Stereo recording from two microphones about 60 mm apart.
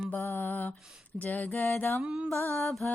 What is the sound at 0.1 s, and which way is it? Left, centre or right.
Mantra, left.